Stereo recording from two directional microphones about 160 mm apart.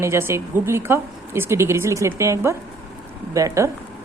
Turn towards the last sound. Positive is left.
turn(degrees=-20)  # may be behind; listen again after turning